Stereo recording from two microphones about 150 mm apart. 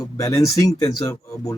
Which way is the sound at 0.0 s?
20° left (ahead or behind).